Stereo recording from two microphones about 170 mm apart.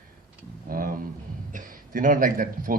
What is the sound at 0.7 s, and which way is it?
Speech, 55° right (ahead or behind).